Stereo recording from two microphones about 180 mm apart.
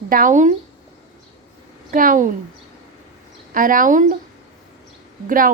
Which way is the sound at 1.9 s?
50° right (ahead or behind).